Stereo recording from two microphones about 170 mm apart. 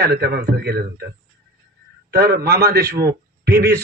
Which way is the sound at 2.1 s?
70° right (ahead or behind).